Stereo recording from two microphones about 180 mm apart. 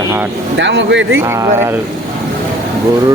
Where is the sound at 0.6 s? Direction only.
80° right.